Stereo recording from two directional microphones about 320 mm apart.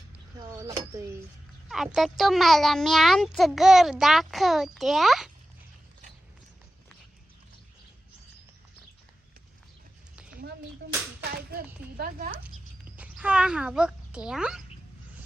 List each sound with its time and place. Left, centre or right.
0.3 s a sound: centre
1.7 s a child's voice: centre
11.3 s speech: right
13.0 s a child's voice: centre